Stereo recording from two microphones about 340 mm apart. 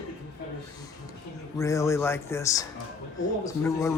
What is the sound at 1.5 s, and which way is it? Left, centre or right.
Speech, centre.